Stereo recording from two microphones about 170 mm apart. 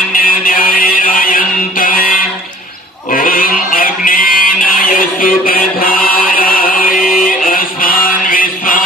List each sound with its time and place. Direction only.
0.1 s music: 55° left (ahead or behind)
3.1 s a sound: 55° left (ahead or behind)
7.2 s music: 55° left (ahead or behind)